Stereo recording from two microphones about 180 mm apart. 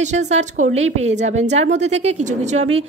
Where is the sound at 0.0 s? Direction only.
40° right (ahead or behind).